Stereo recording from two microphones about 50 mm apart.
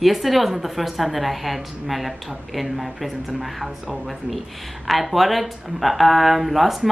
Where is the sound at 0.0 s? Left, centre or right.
Centre.